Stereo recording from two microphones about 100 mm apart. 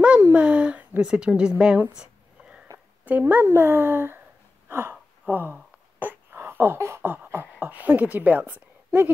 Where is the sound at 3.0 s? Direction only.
15° right (ahead or behind).